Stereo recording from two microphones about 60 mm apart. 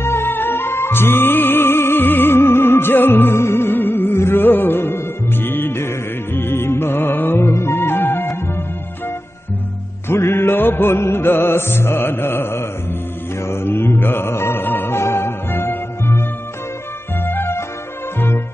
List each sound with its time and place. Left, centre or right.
0.0 s music: left
10.0 s music: left